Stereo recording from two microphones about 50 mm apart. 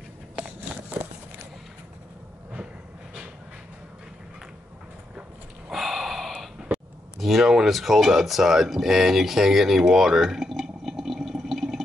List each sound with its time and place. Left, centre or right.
5.7 s gasp: centre
6.6 s a sound: centre
7.2 s speech: centre